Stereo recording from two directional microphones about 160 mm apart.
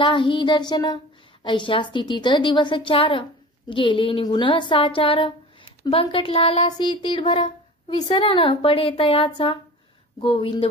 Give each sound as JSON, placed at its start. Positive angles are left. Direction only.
{"t": 0.0, "sound": "child singing", "side_deg": 30}
{"t": 1.4, "sound": "a woman's voice", "side_deg": 30}